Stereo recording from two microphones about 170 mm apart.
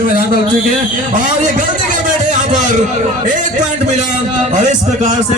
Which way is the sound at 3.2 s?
50° right (ahead or behind).